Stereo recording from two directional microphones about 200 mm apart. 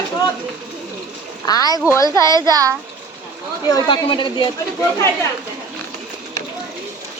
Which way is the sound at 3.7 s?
20° left (ahead or behind).